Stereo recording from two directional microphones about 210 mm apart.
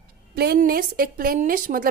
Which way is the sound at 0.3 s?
50° right (ahead or behind).